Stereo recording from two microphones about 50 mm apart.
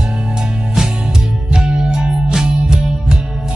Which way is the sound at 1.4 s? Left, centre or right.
Centre.